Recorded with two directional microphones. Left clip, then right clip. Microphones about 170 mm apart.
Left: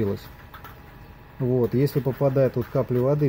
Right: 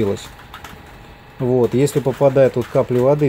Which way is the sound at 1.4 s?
5° right (ahead or behind).